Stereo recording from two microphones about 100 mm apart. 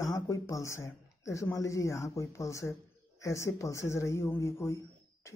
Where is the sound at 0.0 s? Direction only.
35° left (ahead or behind).